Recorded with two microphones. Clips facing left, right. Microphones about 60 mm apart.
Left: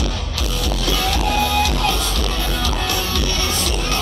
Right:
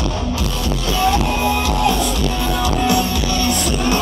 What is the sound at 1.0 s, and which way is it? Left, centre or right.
Music, right.